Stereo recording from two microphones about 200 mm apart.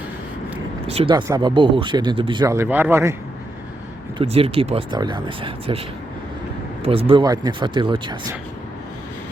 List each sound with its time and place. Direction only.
0.9 s speech: 30° right (ahead or behind); by 3.2 s 15° right (ahead or behind)
4.2 s speech: 30° right (ahead or behind)
6.8 s speech: 30° right (ahead or behind)